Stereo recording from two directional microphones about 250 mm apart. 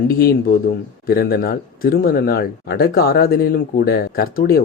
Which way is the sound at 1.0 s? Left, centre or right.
Left.